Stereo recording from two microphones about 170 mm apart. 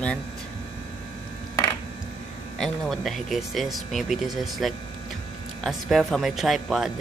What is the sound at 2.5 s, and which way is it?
Speech, 5° left (ahead or behind).